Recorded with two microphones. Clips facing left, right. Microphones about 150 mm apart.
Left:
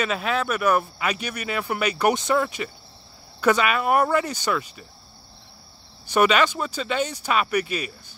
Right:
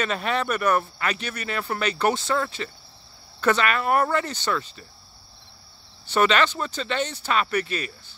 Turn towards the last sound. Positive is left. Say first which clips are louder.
# left 1 dB
turn(degrees=10)  # may be behind; listen again after turning